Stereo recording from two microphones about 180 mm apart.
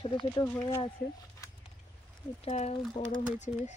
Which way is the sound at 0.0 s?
25° left (ahead or behind).